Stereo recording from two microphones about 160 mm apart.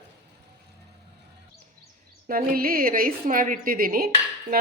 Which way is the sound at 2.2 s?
60° right (ahead or behind).